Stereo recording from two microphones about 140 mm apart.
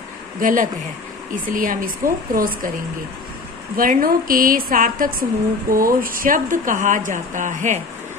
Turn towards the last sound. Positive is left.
turn(degrees=-65)  # may be behind; listen again after turning